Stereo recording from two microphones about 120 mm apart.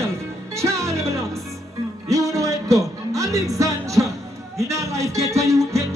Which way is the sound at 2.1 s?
30° right (ahead or behind).